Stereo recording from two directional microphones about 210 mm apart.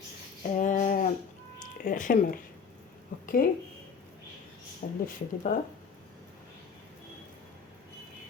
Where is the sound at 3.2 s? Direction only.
40° left (ahead or behind).